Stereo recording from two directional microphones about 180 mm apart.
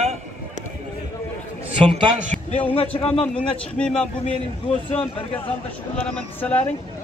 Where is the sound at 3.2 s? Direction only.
5° left (ahead or behind).